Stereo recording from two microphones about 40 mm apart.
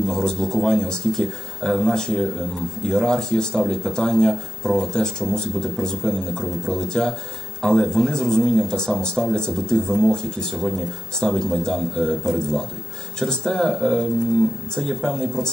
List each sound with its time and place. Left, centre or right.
0.1 s speech: centre